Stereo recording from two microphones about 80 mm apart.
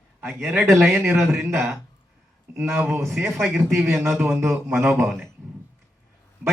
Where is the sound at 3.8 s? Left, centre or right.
Right.